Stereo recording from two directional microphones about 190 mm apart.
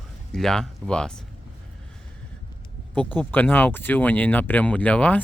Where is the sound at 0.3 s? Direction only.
Centre (ahead or behind).